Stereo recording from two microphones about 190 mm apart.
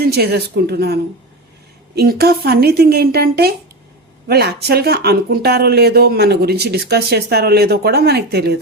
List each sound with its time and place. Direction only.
0.0 s speech: 55° right (ahead or behind)
2.0 s speech: 55° right (ahead or behind)